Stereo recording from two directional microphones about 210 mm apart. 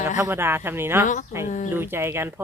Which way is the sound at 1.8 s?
10° right (ahead or behind).